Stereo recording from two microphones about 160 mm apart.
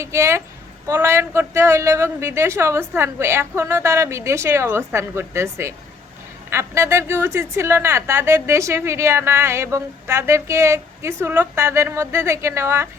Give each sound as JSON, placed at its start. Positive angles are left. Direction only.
{"t": 0.0, "sound": "a woman's voice", "side_deg": -15}